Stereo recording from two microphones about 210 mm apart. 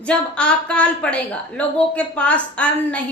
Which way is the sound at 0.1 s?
5° left (ahead or behind).